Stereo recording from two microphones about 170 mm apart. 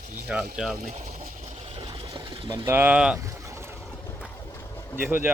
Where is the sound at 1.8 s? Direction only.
25° right (ahead or behind); by 3.2 s 5° right (ahead or behind).